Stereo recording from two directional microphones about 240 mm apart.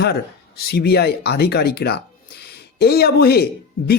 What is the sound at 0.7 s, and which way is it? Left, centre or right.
Speech, left.